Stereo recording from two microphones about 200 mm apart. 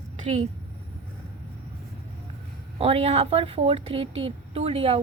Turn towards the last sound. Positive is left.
turn(degrees=-30)  # may be behind; listen again after turning